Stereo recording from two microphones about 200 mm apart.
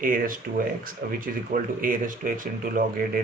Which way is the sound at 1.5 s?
45° right (ahead or behind).